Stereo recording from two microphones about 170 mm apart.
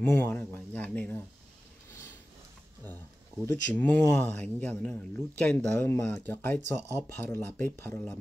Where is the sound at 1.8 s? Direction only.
15° left (ahead or behind).